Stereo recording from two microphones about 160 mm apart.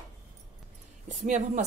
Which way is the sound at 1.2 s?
50° right (ahead or behind).